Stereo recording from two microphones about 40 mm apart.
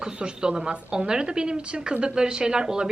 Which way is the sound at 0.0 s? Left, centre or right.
Right.